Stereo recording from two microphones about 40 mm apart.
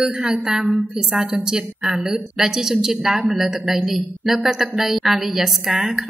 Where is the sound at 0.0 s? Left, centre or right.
Centre.